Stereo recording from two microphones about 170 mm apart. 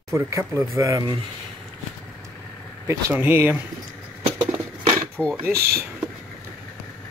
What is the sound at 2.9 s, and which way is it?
Speech, 15° right (ahead or behind).